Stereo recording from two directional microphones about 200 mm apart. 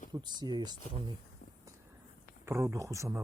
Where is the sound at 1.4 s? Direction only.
45° left (ahead or behind).